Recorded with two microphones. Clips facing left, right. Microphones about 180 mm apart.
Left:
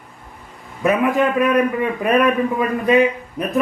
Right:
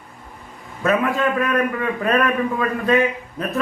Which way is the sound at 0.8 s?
15° left (ahead or behind).